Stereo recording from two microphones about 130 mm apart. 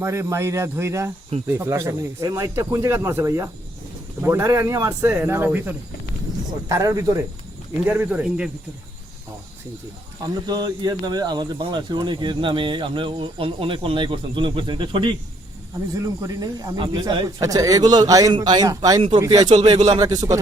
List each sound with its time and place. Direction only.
0.0 s speech: 20° right (ahead or behind)
6.7 s speech: 25° right (ahead or behind)
7.9 s speech: 10° right (ahead or behind)
10.4 s speech: 30° right (ahead or behind)
16.0 s speech: 25° right (ahead or behind)
17.4 s speech: 25° right (ahead or behind)